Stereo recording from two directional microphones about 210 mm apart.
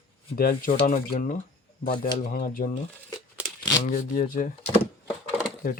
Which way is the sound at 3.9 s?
40° left (ahead or behind).